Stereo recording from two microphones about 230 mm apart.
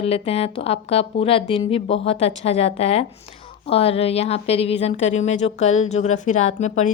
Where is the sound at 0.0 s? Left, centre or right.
Left.